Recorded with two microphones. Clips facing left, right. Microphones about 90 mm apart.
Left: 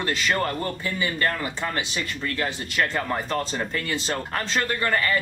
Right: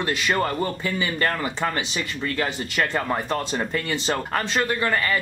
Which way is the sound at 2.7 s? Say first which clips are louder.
Right 1 dB; 15° right (ahead or behind).